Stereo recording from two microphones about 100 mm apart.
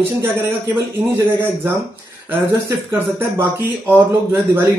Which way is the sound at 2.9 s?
25° right (ahead or behind).